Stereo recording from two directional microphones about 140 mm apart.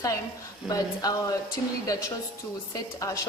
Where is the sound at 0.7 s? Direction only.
25° left (ahead or behind).